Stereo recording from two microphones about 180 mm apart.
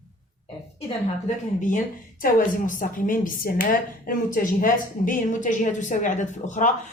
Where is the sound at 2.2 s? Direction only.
50° left (ahead or behind).